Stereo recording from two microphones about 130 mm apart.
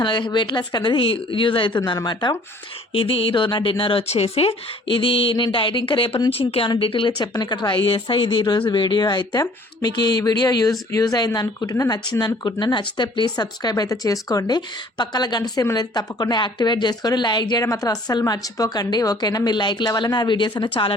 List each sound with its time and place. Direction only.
0.0 s a woman's voice: 35° left (ahead or behind)
2.9 s a woman's voice: 45° left (ahead or behind)